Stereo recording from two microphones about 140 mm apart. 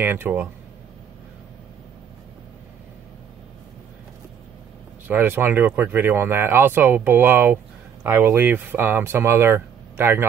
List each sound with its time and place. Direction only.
0.0 s speech: 15° right (ahead or behind)
5.0 s speech: 15° right (ahead or behind)